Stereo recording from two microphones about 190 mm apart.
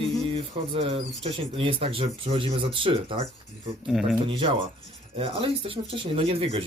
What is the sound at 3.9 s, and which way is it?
Speech, centre (ahead or behind).